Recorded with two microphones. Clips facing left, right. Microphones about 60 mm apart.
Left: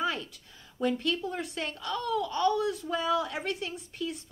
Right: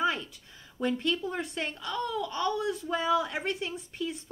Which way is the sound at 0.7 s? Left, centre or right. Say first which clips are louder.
Even; right.